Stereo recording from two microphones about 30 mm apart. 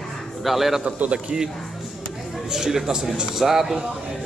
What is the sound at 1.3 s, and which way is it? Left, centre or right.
Speech, right.